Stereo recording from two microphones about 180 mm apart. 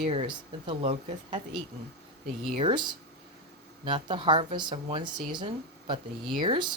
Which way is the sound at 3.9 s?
30° right (ahead or behind).